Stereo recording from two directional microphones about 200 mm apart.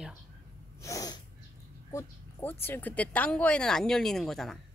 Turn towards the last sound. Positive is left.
turn(degrees=0)  # may be behind; listen again after turning